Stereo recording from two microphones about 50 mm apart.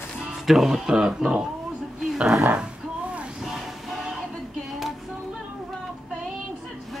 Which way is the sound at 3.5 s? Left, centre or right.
Centre.